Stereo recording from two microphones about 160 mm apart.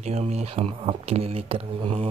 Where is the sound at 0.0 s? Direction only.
40° right (ahead or behind).